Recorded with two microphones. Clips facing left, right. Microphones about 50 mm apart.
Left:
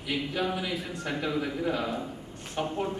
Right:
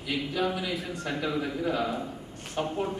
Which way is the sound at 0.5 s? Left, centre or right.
Centre.